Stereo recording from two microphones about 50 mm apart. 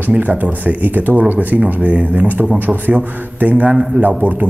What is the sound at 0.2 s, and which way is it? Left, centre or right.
A man's voice, right.